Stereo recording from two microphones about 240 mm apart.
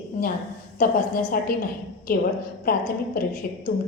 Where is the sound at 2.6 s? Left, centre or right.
Left.